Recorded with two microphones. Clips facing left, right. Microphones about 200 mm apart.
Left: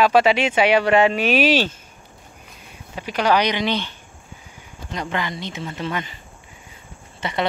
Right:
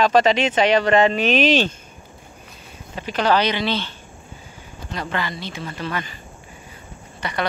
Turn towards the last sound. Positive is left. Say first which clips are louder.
# left 2 dB
turn(degrees=25)  # may be behind; listen again after turning